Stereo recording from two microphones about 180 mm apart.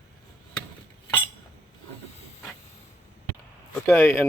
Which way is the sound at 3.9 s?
10° left (ahead or behind).